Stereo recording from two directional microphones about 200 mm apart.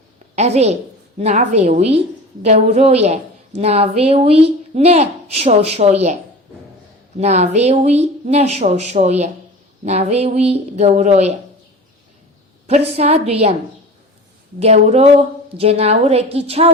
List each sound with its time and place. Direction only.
0.3 s a woman's voice: 35° right (ahead or behind)
7.2 s a woman's voice: 35° right (ahead or behind)
12.6 s a woman's voice: 35° right (ahead or behind)
14.6 s a woman's voice: 30° right (ahead or behind)